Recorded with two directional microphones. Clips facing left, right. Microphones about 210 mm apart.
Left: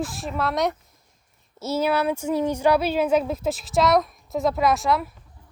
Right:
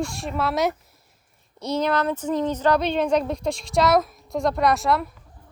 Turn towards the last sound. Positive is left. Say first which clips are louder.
# even
turn(degrees=0)  # may be behind; listen again after turning